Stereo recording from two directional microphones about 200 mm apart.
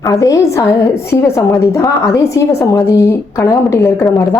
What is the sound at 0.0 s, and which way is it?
A woman's voice, 15° left (ahead or behind).